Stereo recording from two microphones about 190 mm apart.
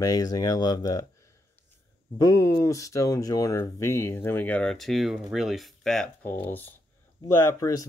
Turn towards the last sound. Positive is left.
turn(degrees=15)  # may be behind; listen again after turning